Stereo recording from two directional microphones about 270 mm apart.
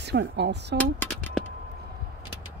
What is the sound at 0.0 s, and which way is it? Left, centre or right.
Speech, right.